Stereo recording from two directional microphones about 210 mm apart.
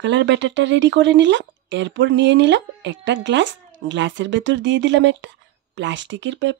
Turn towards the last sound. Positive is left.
turn(degrees=-60)  # may be behind; listen again after turning